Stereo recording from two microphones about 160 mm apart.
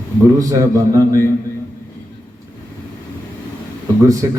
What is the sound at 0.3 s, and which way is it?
Speech, 20° right (ahead or behind).